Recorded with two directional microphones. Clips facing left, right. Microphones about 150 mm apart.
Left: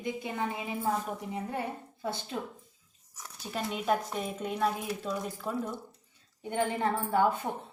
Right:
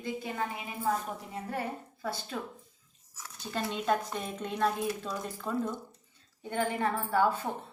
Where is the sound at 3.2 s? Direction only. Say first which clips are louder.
Right 1 dB; 10° left (ahead or behind).